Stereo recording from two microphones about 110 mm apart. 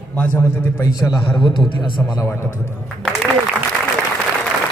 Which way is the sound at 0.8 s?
30° left (ahead or behind).